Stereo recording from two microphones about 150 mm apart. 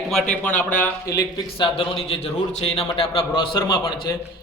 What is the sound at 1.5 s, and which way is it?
Speech, 35° left (ahead or behind).